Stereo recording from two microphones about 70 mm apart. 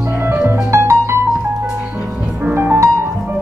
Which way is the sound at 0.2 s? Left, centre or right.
Right.